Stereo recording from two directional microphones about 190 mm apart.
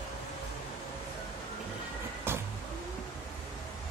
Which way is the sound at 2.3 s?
10° right (ahead or behind).